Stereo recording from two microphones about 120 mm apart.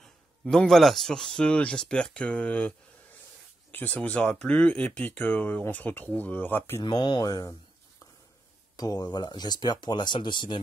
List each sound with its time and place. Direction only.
0.0 s speech: 5° left (ahead or behind)
3.7 s speech: 15° left (ahead or behind)
6.8 s speech: 35° left (ahead or behind)
8.7 s speech: 30° left (ahead or behind)